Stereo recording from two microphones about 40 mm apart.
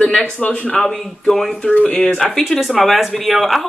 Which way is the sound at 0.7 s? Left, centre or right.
Centre.